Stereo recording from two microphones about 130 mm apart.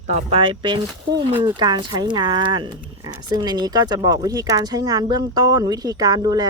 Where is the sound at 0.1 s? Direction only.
50° right (ahead or behind).